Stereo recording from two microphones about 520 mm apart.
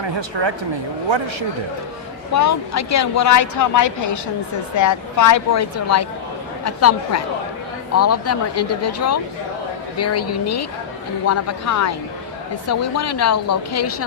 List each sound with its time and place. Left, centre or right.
0.0 s a man's voice: right
2.3 s a woman's voice: left